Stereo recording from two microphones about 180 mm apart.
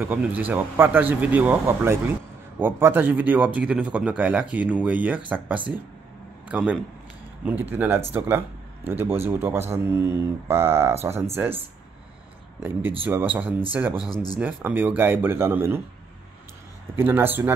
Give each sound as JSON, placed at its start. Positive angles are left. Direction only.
{"t": 0.0, "sound": "speech", "side_deg": -10}
{"t": 6.5, "sound": "speech", "side_deg": -5}
{"t": 13.0, "sound": "speech", "side_deg": -10}
{"t": 14.1, "sound": "speech", "side_deg": 20}
{"t": 14.4, "sound": "speech", "side_deg": -10}
{"t": 16.9, "sound": "speech", "side_deg": -10}